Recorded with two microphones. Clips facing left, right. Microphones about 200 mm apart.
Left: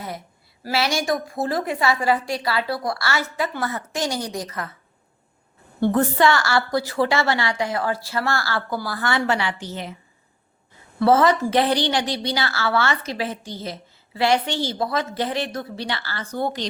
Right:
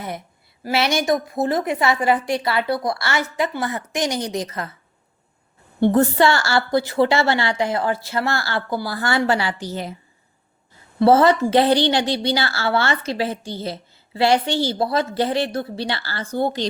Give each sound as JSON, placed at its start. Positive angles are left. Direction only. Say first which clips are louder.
{"t": 0.6, "sound": "a woman's voice", "louder": "right 3 dB", "side_deg": -20}
{"t": 5.8, "sound": "a woman's voice", "louder": "right 3 dB", "side_deg": -30}
{"t": 11.0, "sound": "a woman's voice", "louder": "right 3 dB", "side_deg": -30}